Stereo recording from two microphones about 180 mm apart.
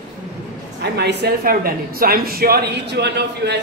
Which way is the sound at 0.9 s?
65° right (ahead or behind).